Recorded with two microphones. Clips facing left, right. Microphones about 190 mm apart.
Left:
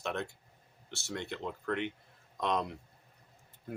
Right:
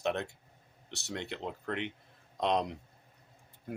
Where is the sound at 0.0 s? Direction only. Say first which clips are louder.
Right 4 dB; 20° right (ahead or behind).